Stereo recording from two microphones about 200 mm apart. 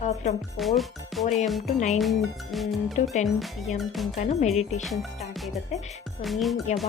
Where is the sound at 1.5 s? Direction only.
Centre (ahead or behind).